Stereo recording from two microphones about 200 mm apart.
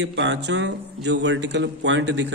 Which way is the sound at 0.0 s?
65° right (ahead or behind).